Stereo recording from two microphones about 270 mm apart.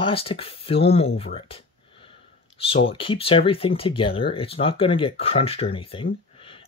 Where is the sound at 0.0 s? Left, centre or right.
Centre.